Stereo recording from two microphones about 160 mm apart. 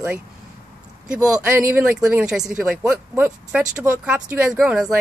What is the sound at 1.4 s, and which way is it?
Speech, 10° right (ahead or behind).